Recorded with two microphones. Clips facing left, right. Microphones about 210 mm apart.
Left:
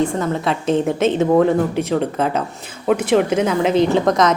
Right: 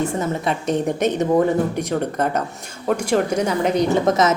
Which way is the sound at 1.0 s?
15° right (ahead or behind).